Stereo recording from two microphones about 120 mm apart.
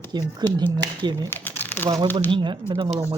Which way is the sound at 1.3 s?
15° left (ahead or behind).